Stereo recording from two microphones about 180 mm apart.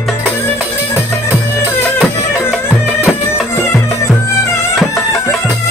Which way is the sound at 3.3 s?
15° left (ahead or behind).